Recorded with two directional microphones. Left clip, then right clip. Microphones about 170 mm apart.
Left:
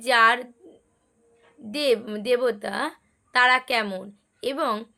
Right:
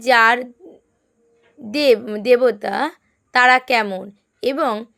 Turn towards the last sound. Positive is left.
turn(degrees=-35)  # may be behind; listen again after turning